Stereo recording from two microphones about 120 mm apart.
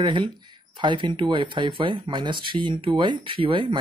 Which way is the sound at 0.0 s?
40° right (ahead or behind).